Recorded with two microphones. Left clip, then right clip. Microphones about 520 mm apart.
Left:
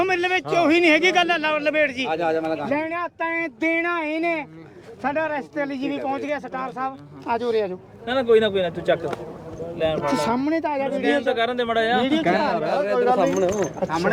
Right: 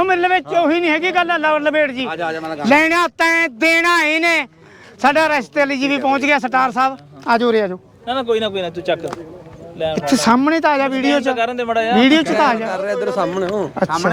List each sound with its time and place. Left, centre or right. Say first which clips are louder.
0.0 s speech: right 6 dB; right
0.6 s speech: right 1 dB; centre; by 2.0 s right
2.0 s a man's voice: even; right
2.6 s speech: right 12 dB; right
3.4 s speech: right 9 dB; right
6.1 s speech: right 14 dB; right
8.0 s speech: even; right
9.7 s speech: right 4 dB; right